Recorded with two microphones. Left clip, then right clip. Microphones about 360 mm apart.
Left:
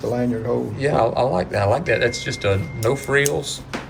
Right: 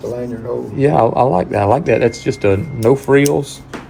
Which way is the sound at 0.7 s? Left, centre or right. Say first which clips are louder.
Right 8 dB; centre.